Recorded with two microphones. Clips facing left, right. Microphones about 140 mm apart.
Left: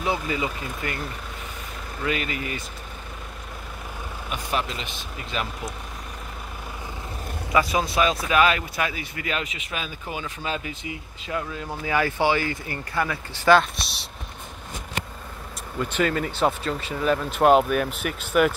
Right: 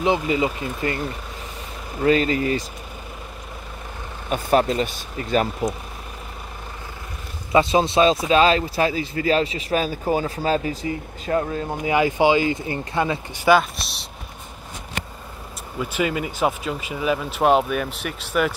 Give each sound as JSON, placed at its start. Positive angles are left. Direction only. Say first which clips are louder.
{"t": 0.0, "sound": "speech", "louder": "right 6 dB", "side_deg": -25}
{"t": 4.3, "sound": "speech", "louder": "right 10 dB", "side_deg": -40}
{"t": 7.5, "sound": "speech", "louder": "right 5 dB", "side_deg": -25}
{"t": 11.7, "sound": "speech", "louder": "right 4 dB", "side_deg": -20}
{"t": 13.5, "sound": "speech", "louder": "right 1 dB", "side_deg": 0}
{"t": 15.8, "sound": "speech", "louder": "even", "side_deg": -10}